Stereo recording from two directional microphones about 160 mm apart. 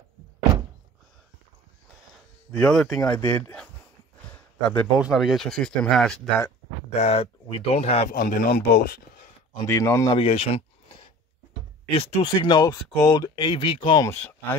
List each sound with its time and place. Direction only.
2.5 s speech: 5° left (ahead or behind)
4.3 s a sound: 5° left (ahead or behind)
5.0 s speech: 5° right (ahead or behind)
6.9 s speech: 45° left (ahead or behind)
8.1 s speech: 60° left (ahead or behind); by 9.3 s 75° left (ahead or behind)
9.6 s speech: 20° left (ahead or behind)
10.1 s speech: 40° left (ahead or behind)
11.9 s speech: 35° left (ahead or behind)